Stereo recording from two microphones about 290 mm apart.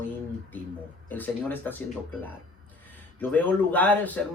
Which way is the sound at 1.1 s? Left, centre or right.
Centre.